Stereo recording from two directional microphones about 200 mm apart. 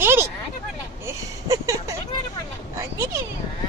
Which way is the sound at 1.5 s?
15° right (ahead or behind).